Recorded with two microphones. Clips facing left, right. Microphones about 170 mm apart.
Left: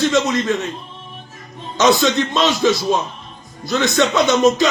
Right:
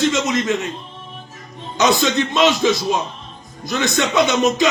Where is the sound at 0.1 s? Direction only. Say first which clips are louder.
Left 2 dB; 20° right (ahead or behind).